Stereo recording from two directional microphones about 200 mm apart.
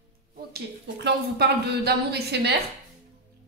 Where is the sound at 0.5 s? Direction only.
55° right (ahead or behind).